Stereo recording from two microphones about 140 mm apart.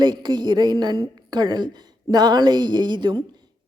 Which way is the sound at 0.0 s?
30° right (ahead or behind).